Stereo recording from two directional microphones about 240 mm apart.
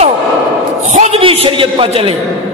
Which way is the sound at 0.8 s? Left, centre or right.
Right.